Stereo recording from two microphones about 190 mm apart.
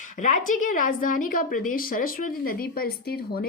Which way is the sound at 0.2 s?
40° left (ahead or behind).